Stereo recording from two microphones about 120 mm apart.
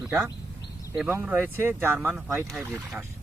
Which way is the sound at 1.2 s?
15° right (ahead or behind).